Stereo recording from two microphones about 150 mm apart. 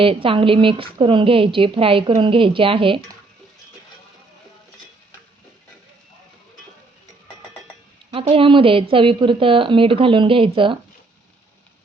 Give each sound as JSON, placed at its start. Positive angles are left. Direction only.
{"t": 0.0, "sound": "a woman's voice", "side_deg": -35}
{"t": 8.1, "sound": "a woman's voice", "side_deg": -35}